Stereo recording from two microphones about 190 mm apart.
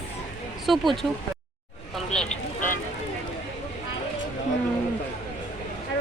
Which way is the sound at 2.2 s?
45° left (ahead or behind).